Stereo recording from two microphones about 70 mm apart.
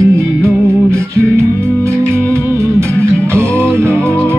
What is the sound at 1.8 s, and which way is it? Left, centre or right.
Music, right.